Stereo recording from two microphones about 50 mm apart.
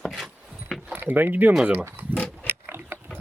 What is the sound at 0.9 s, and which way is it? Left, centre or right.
Speech, right.